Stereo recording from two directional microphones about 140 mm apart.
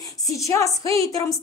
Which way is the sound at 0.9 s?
25° left (ahead or behind).